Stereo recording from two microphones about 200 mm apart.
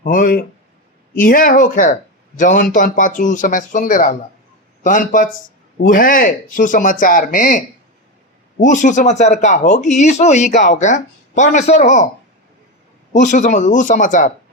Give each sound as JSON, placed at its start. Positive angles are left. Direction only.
{"t": 0.0, "sound": "speech", "side_deg": 40}
{"t": 8.6, "sound": "speech", "side_deg": 40}
{"t": 13.1, "sound": "speech", "side_deg": 40}